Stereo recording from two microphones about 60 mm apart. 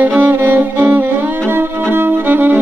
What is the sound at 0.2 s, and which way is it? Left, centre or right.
Music, right.